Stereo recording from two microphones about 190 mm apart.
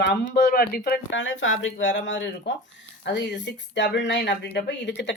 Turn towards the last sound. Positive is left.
turn(degrees=65)  # may be behind; listen again after turning